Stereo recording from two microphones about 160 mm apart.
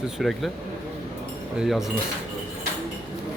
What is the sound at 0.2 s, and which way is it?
Speech, centre (ahead or behind).